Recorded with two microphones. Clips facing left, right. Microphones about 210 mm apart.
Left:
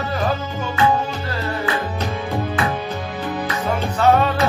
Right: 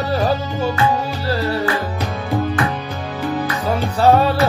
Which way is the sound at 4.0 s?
35° right (ahead or behind).